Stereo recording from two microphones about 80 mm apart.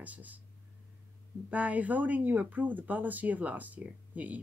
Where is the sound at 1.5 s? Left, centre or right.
Centre.